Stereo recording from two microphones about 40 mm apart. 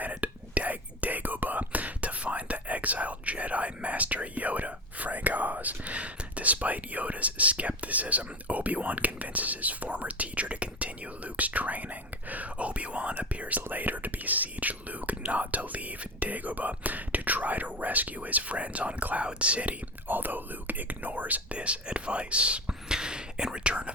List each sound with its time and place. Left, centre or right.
0.0 s whispering: right
13.6 s whispering: right
20.1 s whispering: right